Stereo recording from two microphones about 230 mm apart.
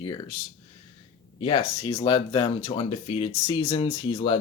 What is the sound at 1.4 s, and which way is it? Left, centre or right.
Speech, left.